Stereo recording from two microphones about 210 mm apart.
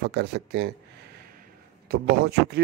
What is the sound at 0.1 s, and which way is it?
Speech, 55° right (ahead or behind).